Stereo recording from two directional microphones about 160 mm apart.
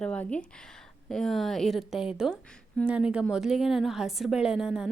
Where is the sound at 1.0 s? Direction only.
Centre (ahead or behind).